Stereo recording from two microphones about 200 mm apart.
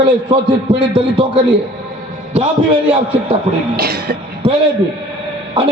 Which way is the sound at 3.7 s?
50° right (ahead or behind).